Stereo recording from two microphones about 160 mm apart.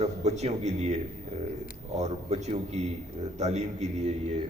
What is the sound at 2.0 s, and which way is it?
A man's voice, 45° right (ahead or behind).